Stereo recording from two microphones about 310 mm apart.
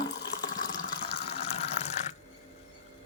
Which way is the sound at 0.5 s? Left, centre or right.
Centre.